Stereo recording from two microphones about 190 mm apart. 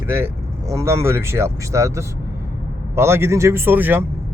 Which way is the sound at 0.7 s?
15° right (ahead or behind).